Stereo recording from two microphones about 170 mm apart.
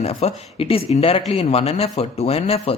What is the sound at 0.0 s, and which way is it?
Speech, 35° left (ahead or behind).